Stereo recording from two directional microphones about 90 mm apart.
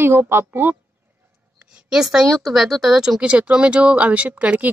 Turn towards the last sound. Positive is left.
turn(degrees=-15)  # may be behind; listen again after turning